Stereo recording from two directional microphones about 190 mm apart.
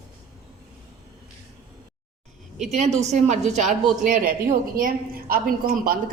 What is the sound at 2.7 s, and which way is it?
A woman's voice, 35° right (ahead or behind).